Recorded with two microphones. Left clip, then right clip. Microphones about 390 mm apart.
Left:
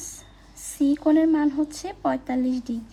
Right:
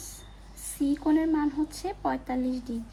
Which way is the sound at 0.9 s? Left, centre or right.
Centre.